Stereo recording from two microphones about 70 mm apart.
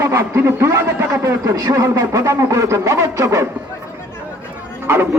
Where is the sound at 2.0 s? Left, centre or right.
Right.